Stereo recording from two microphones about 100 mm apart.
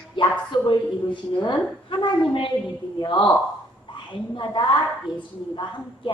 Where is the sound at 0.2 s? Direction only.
50° left (ahead or behind).